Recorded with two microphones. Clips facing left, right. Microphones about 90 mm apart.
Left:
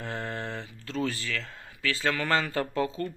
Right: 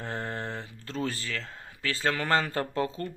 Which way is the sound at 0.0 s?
35° right (ahead or behind).